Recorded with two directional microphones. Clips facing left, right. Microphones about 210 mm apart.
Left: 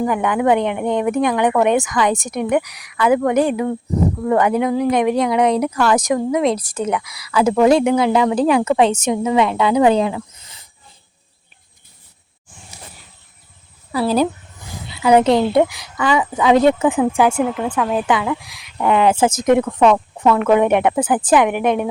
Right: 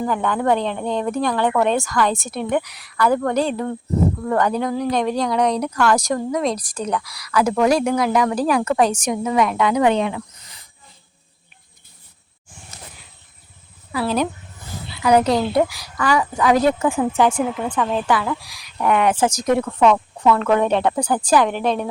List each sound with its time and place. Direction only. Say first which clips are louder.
0.0 s a woman's voice: left 3 dB; 15° left (ahead or behind)
4.4 s speech: left 4 dB; 20° left (ahead or behind)
13.9 s speech: left 4 dB; 35° left (ahead or behind)
17.0 s a woman's voice: left 2 dB; 10° left (ahead or behind)
18.0 s a woman's voice: left 2 dB; 15° left (ahead or behind)